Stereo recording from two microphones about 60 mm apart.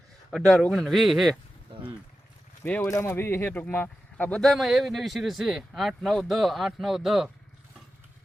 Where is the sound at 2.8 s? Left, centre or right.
Left.